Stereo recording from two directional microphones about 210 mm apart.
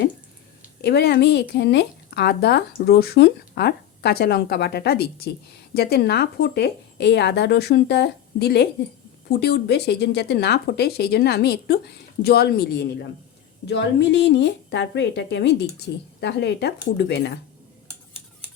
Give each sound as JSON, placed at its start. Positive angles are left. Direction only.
{"t": 0.8, "sound": "a woman's voice", "side_deg": 50}